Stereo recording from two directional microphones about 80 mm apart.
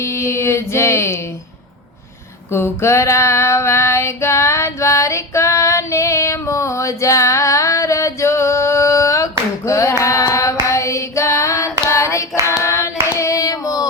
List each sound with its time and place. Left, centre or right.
0.0 s a sound: left
2.5 s female singing: left
9.6 s clapping: left
10.0 s singing: left
12.5 s hands: left